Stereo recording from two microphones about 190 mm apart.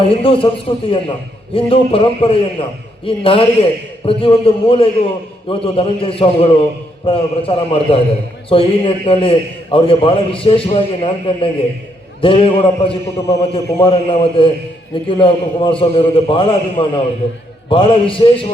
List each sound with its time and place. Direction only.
0.0 s a man's voice: 30° left (ahead or behind)